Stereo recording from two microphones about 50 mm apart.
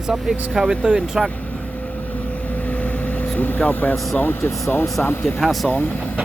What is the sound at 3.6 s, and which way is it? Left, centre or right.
Speech, left.